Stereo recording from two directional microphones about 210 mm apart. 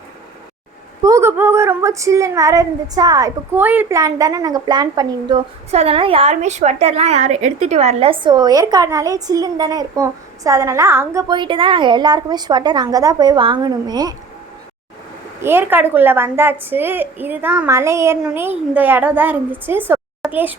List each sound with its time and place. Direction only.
1.0 s a woman's voice: 15° right (ahead or behind)
15.4 s a woman's voice: 10° right (ahead or behind)
19.9 s a sound: 10° right (ahead or behind)